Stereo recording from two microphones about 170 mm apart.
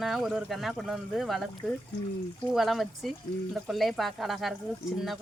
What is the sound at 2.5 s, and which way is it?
Speech, centre (ahead or behind).